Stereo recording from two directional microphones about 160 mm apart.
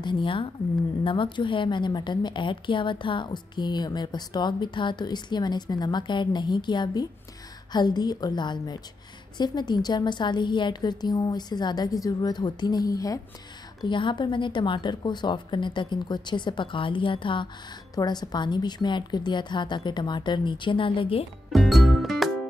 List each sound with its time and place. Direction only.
0.0 s a woman's voice: 30° left (ahead or behind)
21.5 s music: centre (ahead or behind)